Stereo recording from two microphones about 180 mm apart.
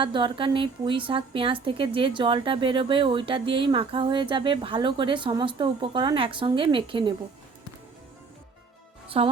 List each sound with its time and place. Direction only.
0.0 s a woman's voice: 25° right (ahead or behind)
9.0 s music: 30° right (ahead or behind)